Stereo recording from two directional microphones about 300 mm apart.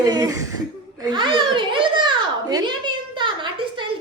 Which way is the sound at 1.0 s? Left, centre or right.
Centre.